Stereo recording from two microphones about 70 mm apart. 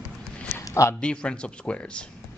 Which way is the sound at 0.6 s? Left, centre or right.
Left.